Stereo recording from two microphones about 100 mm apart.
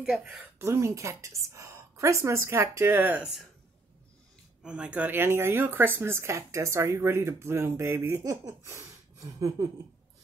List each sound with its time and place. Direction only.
0.0 s speech: 10° right (ahead or behind)
0.6 s speech: 30° right (ahead or behind)
4.6 s speech: 10° right (ahead or behind)
8.2 s speech: 30° right (ahead or behind)